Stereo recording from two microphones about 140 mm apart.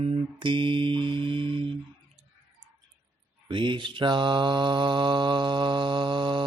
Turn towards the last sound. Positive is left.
turn(degrees=-35)  # may be behind; listen again after turning